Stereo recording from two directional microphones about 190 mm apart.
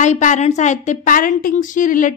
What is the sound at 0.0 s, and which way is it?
A woman's voice, 40° left (ahead or behind).